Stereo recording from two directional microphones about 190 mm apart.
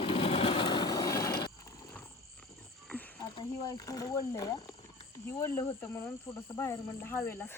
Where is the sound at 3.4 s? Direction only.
20° left (ahead or behind).